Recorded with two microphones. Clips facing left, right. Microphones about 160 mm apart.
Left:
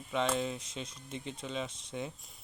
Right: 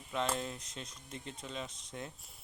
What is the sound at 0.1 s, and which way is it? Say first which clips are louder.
Speech: left 4 dB; centre (ahead or behind).